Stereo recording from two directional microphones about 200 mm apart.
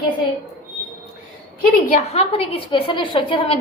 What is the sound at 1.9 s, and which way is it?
A woman's voice, 35° left (ahead or behind).